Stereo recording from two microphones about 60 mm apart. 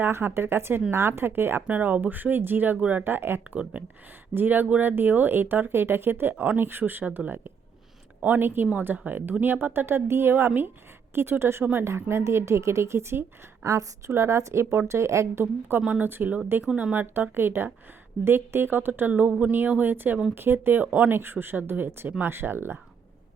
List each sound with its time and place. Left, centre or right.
0.0 s speech: right
1.6 s a woman's voice: right
15.7 s speech: right